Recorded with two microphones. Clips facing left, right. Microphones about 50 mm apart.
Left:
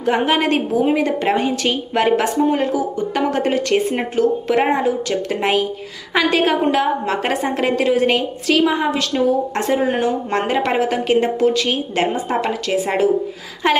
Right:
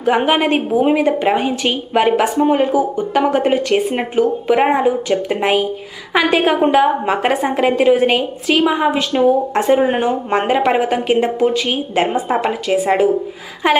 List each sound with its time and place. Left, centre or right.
0.0 s speech: centre
2.4 s speech: centre
9.8 s speech: right; by 13.1 s centre
13.6 s speech: centre